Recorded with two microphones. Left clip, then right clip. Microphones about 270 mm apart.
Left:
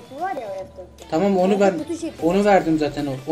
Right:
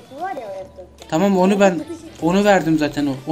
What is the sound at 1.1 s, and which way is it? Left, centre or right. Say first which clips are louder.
Speech: right 2 dB; right.